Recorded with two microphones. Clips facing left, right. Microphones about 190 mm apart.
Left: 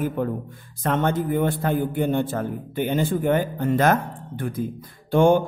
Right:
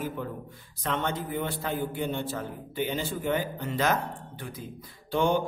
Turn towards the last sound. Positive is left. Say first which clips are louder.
# left 8 dB
turn(degrees=50)  # may be behind; listen again after turning